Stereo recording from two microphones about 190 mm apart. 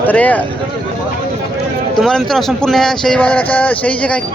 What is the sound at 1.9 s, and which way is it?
Speech, centre (ahead or behind).